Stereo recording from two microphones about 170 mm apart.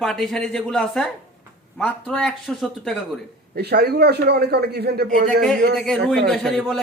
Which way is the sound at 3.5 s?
70° right (ahead or behind).